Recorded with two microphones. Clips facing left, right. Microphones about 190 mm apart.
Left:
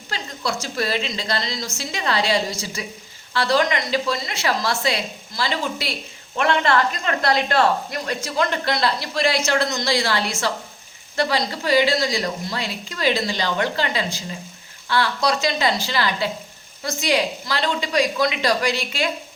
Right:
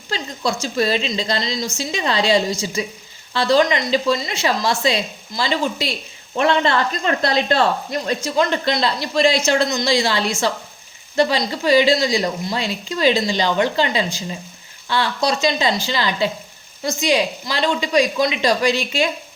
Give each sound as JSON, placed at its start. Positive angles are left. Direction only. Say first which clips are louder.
{"t": 0.6, "sound": "a woman's voice", "louder": "right 6 dB", "side_deg": -20}